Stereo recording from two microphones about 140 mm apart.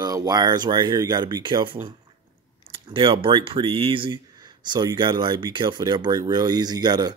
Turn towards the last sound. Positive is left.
turn(degrees=-30)  # may be behind; listen again after turning